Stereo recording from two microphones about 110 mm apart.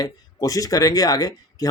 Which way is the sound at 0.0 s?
35° left (ahead or behind).